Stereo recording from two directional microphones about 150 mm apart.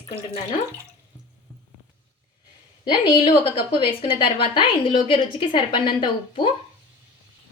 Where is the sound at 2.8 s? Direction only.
35° left (ahead or behind).